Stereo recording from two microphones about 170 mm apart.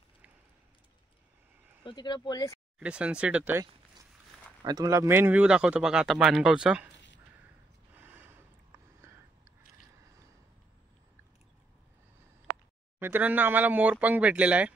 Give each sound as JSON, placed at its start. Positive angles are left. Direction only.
{"t": 1.9, "sound": "speech", "side_deg": 25}
{"t": 2.8, "sound": "speech", "side_deg": -5}
{"t": 4.6, "sound": "speech", "side_deg": -20}
{"t": 7.9, "sound": "a sound", "side_deg": -10}
{"t": 13.0, "sound": "speech", "side_deg": -10}